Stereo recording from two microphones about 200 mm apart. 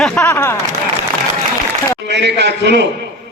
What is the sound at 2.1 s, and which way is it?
Speech, 60° right (ahead or behind).